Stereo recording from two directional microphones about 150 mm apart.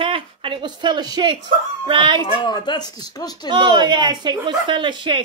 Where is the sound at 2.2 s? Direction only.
30° left (ahead or behind).